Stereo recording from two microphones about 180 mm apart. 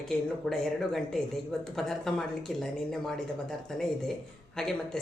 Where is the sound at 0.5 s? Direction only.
Centre (ahead or behind).